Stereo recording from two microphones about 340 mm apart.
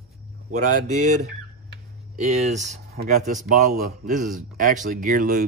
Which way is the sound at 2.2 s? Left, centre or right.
Centre.